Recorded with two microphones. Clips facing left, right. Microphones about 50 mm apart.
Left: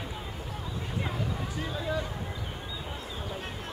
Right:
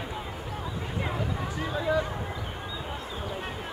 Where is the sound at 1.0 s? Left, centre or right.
Right.